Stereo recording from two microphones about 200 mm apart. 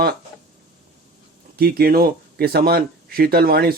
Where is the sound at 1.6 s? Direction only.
50° right (ahead or behind).